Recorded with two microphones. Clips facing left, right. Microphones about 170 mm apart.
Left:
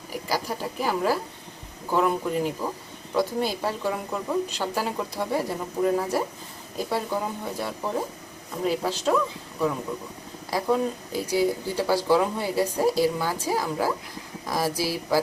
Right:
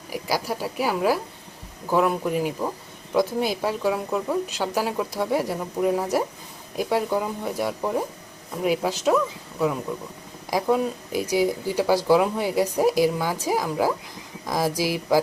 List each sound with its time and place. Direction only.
0.1 s a woman's voice: 10° right (ahead or behind)